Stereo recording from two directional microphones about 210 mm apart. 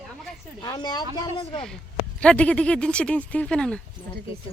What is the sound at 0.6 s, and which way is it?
Speech, 20° left (ahead or behind).